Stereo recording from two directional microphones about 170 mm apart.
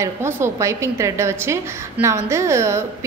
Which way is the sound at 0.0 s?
15° right (ahead or behind).